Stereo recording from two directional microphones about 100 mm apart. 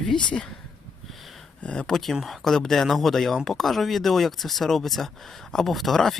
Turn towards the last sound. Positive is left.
turn(degrees=5)  # may be behind; listen again after turning